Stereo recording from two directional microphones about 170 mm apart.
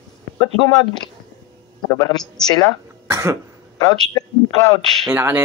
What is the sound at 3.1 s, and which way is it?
Cough, 20° right (ahead or behind).